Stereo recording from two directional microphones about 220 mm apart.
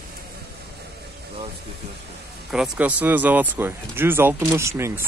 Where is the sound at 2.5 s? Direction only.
5° right (ahead or behind).